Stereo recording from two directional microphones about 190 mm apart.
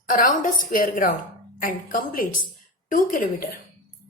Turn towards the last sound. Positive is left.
turn(degrees=45)  # may be behind; listen again after turning